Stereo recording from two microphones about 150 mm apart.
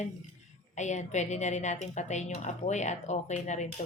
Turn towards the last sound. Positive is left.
turn(degrees=50)  # may be behind; listen again after turning